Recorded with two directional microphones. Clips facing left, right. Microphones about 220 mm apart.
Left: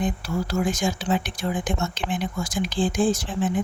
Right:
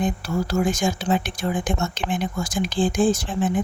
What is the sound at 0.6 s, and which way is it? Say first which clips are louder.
Speech: right 2 dB; 45° right (ahead or behind).